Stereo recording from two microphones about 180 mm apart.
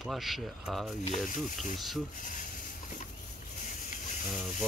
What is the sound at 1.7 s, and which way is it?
Speech, centre (ahead or behind).